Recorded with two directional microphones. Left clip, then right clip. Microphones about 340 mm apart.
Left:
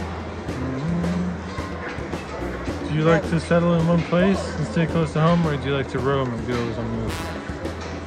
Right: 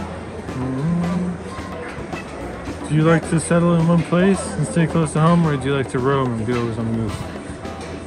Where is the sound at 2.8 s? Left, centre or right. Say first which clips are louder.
Right 2 dB; right.